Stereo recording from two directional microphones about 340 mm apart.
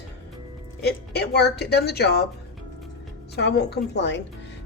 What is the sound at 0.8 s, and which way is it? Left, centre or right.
A woman's voice, left.